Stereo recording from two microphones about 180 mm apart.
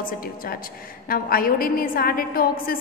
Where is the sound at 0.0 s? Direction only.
55° left (ahead or behind).